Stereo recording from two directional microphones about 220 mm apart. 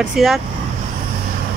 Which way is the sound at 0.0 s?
Centre (ahead or behind).